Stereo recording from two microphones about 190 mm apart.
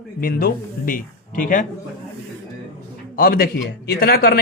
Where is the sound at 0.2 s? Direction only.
50° left (ahead or behind).